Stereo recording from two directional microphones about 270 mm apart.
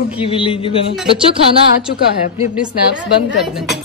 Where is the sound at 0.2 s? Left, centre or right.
Centre.